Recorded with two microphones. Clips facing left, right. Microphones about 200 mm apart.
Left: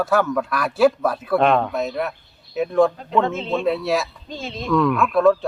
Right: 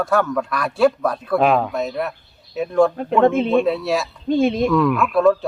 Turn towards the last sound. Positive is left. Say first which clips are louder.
# even
turn(degrees=0)  # may be behind; listen again after turning